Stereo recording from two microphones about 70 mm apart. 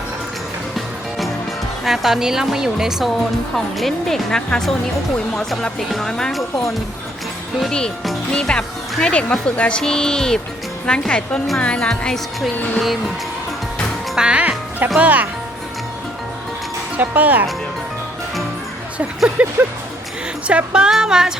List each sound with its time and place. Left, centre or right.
1.8 s a woman's voice: centre
8.3 s speech: centre
14.2 s music: centre
14.9 s speech: right
17.0 s speech: right
19.4 s music: centre